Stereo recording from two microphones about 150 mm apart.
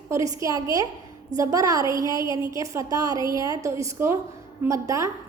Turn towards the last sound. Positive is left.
turn(degrees=-20)  # may be behind; listen again after turning